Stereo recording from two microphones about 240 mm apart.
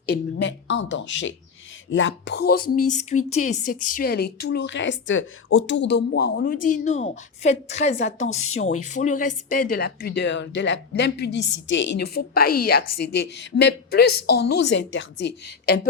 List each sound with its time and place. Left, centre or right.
0.0 s a woman's voice: left